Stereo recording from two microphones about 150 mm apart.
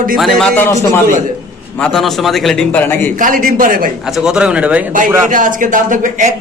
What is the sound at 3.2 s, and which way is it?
Speech, 65° right (ahead or behind).